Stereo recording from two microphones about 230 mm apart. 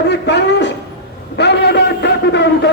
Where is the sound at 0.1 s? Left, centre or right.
Left.